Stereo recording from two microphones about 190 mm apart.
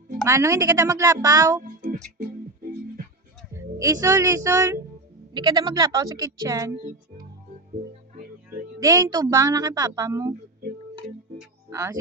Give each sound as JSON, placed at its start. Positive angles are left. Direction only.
{"t": 0.3, "sound": "speech", "side_deg": -15}
{"t": 3.5, "sound": "speech", "side_deg": -15}
{"t": 8.4, "sound": "speech", "side_deg": -15}
{"t": 11.7, "sound": "speech", "side_deg": -15}